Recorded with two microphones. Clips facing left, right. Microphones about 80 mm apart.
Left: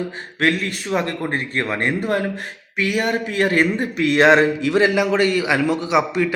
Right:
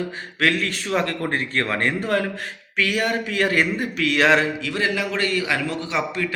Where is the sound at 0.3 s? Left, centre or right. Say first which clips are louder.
Left 2 dB; left.